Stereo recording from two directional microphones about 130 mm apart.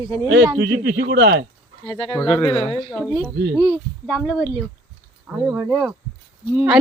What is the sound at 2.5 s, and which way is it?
Speech, 40° left (ahead or behind).